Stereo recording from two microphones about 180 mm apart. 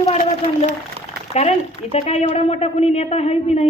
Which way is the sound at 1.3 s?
35° left (ahead or behind).